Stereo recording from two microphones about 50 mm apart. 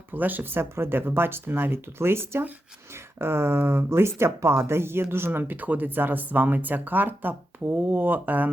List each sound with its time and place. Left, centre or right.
0.1 s speech: right